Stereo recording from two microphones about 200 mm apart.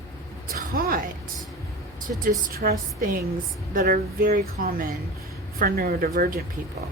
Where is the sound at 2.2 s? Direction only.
45° right (ahead or behind).